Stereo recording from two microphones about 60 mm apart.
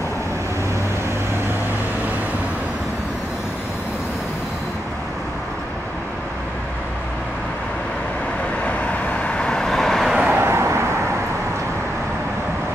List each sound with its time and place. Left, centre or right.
9.4 s vehicle: centre
10.1 s vehicle: centre
10.4 s vehicle: right